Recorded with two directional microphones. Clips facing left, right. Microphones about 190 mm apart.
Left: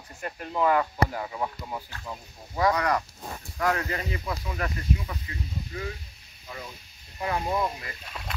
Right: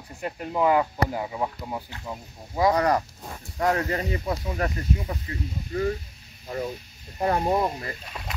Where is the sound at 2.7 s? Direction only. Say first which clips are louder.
Right 4 dB; 35° right (ahead or behind).